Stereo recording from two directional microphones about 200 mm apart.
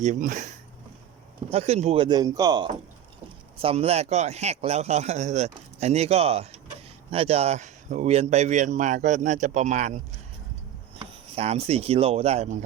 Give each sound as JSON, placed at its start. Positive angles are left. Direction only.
{"t": 0.0, "sound": "speech", "side_deg": -40}
{"t": 11.0, "sound": "speech", "side_deg": -30}